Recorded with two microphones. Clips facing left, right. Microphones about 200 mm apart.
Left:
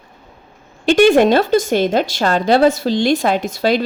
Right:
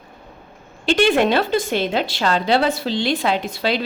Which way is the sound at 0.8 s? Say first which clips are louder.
Left 6 dB; 45° left (ahead or behind).